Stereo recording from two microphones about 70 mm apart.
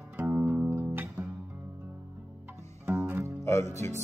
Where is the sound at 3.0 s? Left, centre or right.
Right.